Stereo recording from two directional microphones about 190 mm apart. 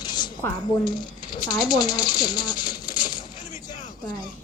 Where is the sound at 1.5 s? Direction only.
20° left (ahead or behind).